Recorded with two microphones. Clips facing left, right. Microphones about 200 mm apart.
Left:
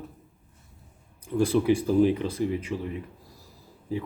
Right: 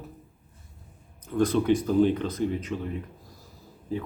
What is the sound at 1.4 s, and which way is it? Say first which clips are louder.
Speech: even; 10° left (ahead or behind).